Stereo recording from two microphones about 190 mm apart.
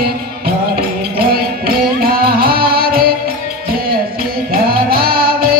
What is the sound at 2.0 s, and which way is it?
Music, 50° right (ahead or behind).